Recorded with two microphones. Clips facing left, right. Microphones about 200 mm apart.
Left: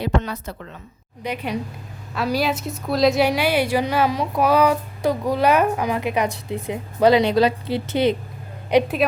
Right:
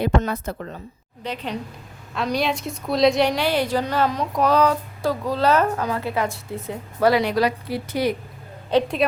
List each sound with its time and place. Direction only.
0.0 s a woman's voice: 50° right (ahead or behind)
1.2 s a woman's voice: 10° left (ahead or behind)
8.7 s a woman's voice: 5° left (ahead or behind)